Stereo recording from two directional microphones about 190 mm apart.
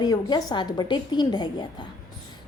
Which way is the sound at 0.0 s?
20° left (ahead or behind).